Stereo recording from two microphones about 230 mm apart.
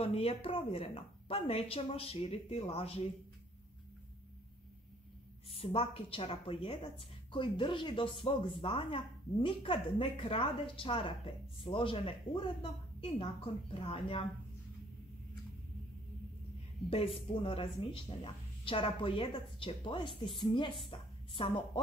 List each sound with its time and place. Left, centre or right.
0.0 s a woman's voice: left
5.5 s a woman's voice: left
16.9 s a woman's voice: left